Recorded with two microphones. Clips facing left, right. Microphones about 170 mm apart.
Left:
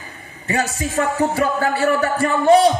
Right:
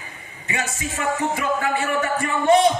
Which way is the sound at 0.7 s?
35° left (ahead or behind).